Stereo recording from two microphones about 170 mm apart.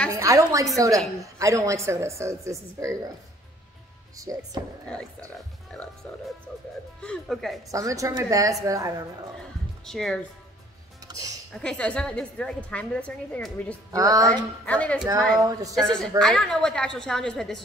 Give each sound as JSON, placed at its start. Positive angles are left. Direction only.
{"t": 0.1, "sound": "a woman's voice", "side_deg": -20}
{"t": 4.2, "sound": "a woman's voice", "side_deg": -20}
{"t": 5.7, "sound": "a woman's voice", "side_deg": 5}
{"t": 7.0, "sound": "a woman's voice", "side_deg": 5}
{"t": 7.7, "sound": "a woman's voice", "side_deg": -20}
{"t": 9.8, "sound": "a woman's voice", "side_deg": 5}
{"t": 11.1, "sound": "music", "side_deg": -20}
{"t": 11.5, "sound": "a woman's voice", "side_deg": 5}
{"t": 13.9, "sound": "a woman's voice", "side_deg": -20}
{"t": 14.3, "sound": "a woman's voice", "side_deg": 10}